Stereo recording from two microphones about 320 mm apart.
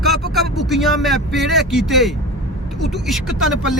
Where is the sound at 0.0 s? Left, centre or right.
Centre.